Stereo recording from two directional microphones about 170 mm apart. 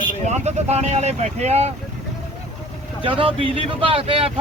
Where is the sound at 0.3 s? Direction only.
40° right (ahead or behind).